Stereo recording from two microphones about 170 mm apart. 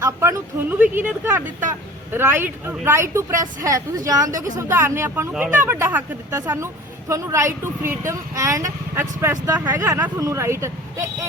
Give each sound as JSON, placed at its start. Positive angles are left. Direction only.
{"t": 0.0, "sound": "a woman's voice", "side_deg": -15}